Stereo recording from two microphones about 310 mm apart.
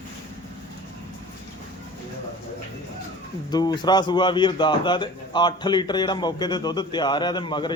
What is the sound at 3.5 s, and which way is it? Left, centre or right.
A man's voice, centre.